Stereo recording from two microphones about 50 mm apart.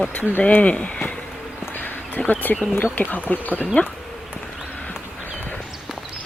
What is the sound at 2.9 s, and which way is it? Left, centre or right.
Speech, left.